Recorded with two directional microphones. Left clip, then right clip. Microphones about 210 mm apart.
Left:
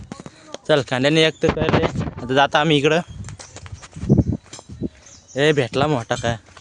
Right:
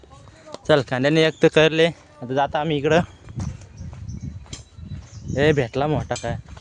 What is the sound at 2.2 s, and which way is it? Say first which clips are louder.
Speech: left 5 dB; 20° left (ahead or behind).